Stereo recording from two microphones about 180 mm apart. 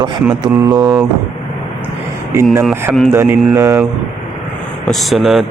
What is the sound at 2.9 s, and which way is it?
Speech, centre (ahead or behind).